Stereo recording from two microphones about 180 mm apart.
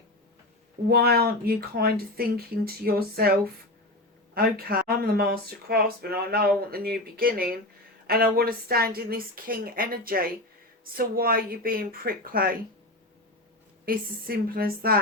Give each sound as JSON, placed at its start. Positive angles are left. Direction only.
{"t": 0.9, "sound": "speech", "side_deg": -60}
{"t": 4.4, "sound": "speech", "side_deg": -55}
{"t": 13.8, "sound": "speech", "side_deg": -55}